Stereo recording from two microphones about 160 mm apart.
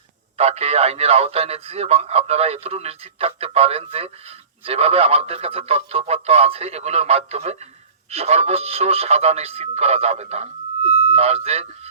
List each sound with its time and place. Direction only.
0.3 s a man's voice: 40° right (ahead or behind)